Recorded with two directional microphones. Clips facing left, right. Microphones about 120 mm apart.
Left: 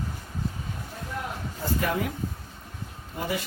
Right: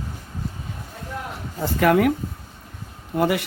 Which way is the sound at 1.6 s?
75° right (ahead or behind).